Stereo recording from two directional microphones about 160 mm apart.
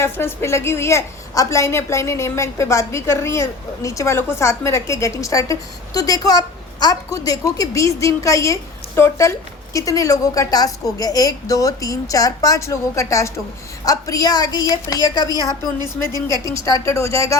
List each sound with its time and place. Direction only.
0.0 s a woman's voice: 15° left (ahead or behind)